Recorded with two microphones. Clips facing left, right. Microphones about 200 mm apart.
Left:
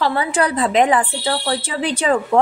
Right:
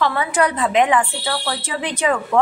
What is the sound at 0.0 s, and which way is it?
Speech, 30° left (ahead or behind).